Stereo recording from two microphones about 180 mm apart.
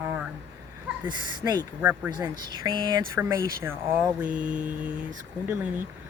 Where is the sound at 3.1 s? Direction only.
15° right (ahead or behind).